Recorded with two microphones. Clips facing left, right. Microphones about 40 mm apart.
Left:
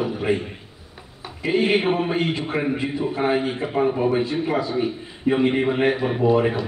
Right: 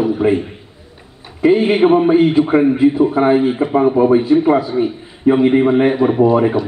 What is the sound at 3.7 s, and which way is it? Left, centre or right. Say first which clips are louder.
A man's voice: right 8 dB; right.